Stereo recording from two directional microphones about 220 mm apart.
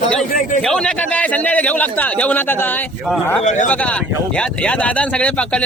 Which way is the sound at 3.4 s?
35° left (ahead or behind).